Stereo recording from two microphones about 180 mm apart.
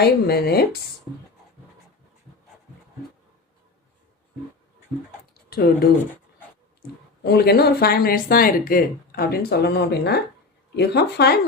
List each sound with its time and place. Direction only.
0.0 s speech: 60° left (ahead or behind)
5.3 s typing: 55° left (ahead or behind)
7.3 s speech: 60° left (ahead or behind)